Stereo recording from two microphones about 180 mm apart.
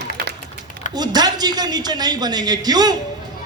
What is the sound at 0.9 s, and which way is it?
A man's voice, 25° right (ahead or behind).